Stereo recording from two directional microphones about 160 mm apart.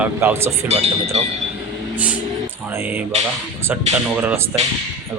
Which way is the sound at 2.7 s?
15° right (ahead or behind).